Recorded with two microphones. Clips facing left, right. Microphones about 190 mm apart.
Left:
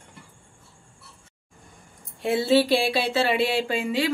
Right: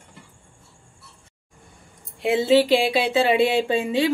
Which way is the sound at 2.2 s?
15° right (ahead or behind).